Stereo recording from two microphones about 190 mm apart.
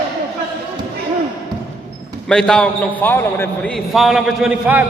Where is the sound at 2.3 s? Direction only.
5° left (ahead or behind).